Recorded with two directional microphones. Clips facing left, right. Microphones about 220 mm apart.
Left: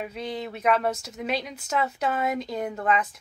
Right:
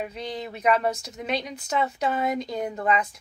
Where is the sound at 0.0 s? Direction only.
Centre (ahead or behind).